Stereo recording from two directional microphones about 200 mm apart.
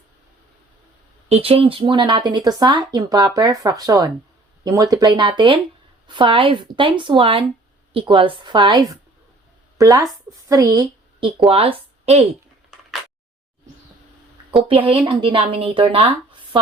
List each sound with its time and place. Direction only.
1.3 s a woman's voice: 30° right (ahead or behind)
14.5 s speech: 25° right (ahead or behind)